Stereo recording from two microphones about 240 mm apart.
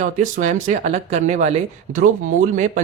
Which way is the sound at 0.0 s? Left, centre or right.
Right.